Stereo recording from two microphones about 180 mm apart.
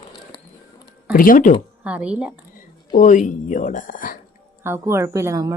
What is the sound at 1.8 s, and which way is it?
Speech, 5° right (ahead or behind).